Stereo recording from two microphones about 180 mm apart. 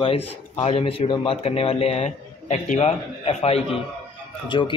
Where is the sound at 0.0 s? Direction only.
35° left (ahead or behind).